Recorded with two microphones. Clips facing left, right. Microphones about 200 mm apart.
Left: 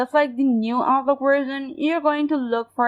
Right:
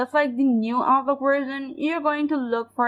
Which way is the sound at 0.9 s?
65° left (ahead or behind).